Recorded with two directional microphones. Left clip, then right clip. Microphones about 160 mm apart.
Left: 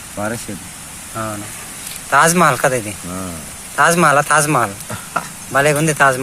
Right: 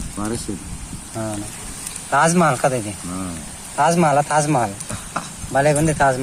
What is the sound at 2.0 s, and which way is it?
A man's voice, centre (ahead or behind).